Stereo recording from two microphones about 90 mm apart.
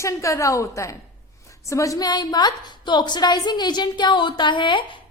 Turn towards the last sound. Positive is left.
turn(degrees=65)  # may be behind; listen again after turning